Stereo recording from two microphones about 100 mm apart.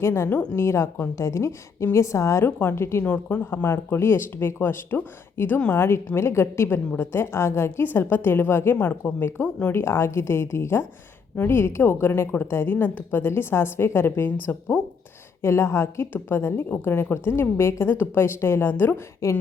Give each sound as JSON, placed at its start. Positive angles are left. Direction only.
{"t": 0.0, "sound": "a woman's voice", "side_deg": 25}
{"t": 3.0, "sound": "a woman's voice", "side_deg": 15}
{"t": 3.4, "sound": "a woman's voice", "side_deg": 25}
{"t": 5.7, "sound": "a woman's voice", "side_deg": 25}
{"t": 15.4, "sound": "a woman's voice", "side_deg": 25}